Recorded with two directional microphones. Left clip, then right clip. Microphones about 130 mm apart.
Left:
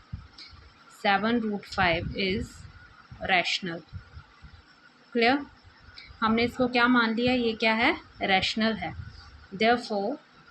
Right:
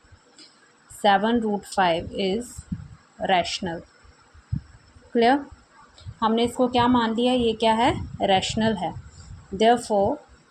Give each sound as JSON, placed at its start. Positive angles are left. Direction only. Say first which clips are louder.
{"t": 1.0, "sound": "a woman's voice", "louder": "right 5 dB", "side_deg": -30}
{"t": 5.1, "sound": "a woman's voice", "louder": "right 4 dB", "side_deg": -30}